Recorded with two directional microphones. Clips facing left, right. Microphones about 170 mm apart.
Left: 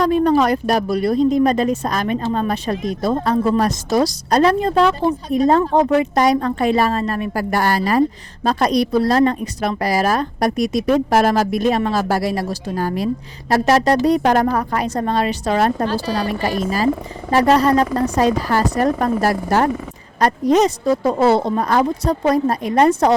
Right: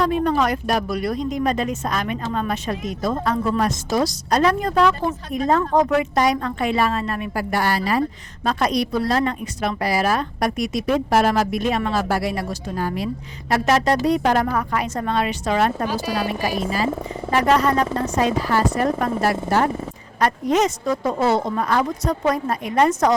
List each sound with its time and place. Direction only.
0.0 s a woman's voice: 40° left (ahead or behind)
15.9 s speech: 10° right (ahead or behind)
17.3 s a woman's voice: 35° left (ahead or behind)